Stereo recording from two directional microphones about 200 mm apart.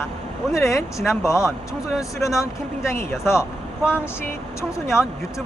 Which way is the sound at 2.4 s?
15° left (ahead or behind).